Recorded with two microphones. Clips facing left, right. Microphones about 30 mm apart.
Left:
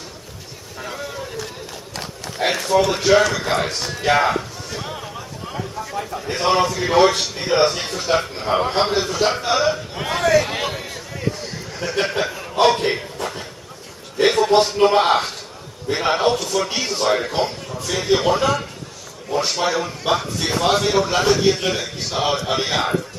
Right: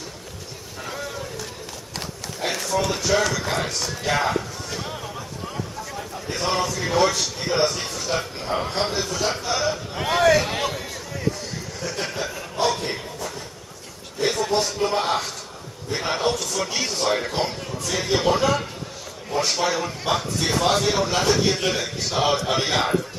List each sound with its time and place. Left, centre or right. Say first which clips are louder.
0.8 s a sound: left 2 dB; centre
2.3 s run: left 7 dB; left
3.0 s a man's voice: left 6 dB; left
4.7 s a sound: left 3 dB; centre
6.2 s a man's voice: left 6 dB; left
9.9 s speech: right 1 dB; centre
10.6 s a sound: left 1 dB; centre
11.9 s a man's voice: left 8 dB; left
12.5 s a sound: left 7 dB; left
14.5 s a man's voice: left 8 dB; left
15.9 s a man's voice: left 5 dB; left; by 18.7 s centre
19.6 s a man's voice: left 3 dB; centre